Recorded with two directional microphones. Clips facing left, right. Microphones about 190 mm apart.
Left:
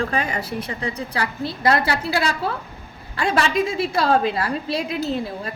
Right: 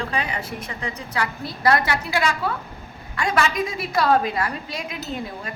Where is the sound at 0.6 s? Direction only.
35° left (ahead or behind).